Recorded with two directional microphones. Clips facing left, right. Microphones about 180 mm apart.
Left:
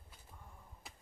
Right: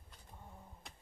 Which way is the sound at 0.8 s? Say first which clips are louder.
Even; 5° left (ahead or behind).